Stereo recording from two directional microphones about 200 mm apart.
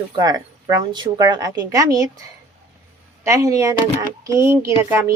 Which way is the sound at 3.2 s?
15° right (ahead or behind).